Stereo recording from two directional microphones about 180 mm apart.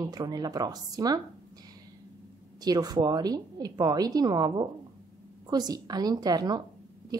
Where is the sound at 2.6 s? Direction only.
20° right (ahead or behind).